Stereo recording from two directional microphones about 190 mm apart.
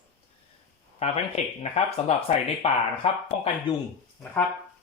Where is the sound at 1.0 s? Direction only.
35° left (ahead or behind).